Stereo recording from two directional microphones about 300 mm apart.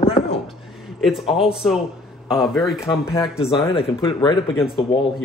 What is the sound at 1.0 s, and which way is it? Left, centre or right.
A man's voice, centre.